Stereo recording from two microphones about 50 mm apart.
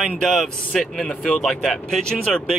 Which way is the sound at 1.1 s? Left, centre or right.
Centre.